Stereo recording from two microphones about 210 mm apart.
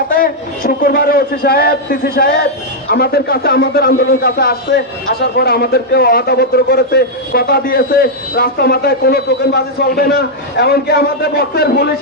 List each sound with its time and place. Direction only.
0.2 s speech: 45° left (ahead or behind)